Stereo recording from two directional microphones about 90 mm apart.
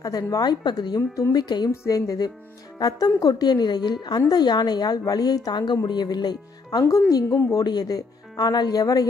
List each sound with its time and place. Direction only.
0.3 s a woman's voice: 50° left (ahead or behind)
1.7 s music: 40° left (ahead or behind)
2.8 s a woman's voice: 45° left (ahead or behind)
6.8 s music: 35° left (ahead or behind)
7.2 s speech: 25° left (ahead or behind)
7.5 s a woman's voice: 45° left (ahead or behind)